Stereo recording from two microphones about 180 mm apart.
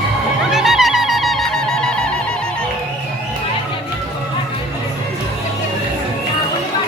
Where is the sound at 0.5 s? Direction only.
Centre (ahead or behind).